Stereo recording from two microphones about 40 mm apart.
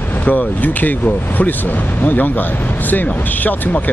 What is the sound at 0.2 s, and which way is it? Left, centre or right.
Speech, left.